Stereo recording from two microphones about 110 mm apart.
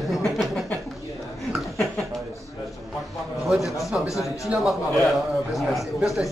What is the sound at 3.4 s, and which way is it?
A man's voice, centre (ahead or behind).